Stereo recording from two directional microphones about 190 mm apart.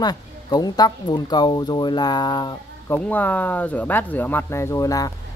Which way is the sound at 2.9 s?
10° left (ahead or behind).